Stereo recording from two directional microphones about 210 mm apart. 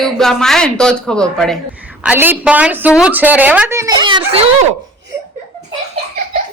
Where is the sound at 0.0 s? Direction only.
Centre (ahead or behind); by 4.2 s 20° right (ahead or behind).